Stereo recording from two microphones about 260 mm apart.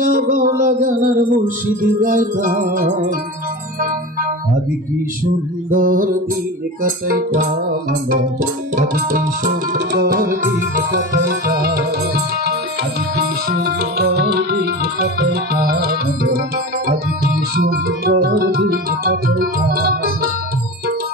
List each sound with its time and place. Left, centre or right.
0.0 s music: right
5.7 s music: right
8.7 s music: right
13.5 s music: right
17.6 s music: right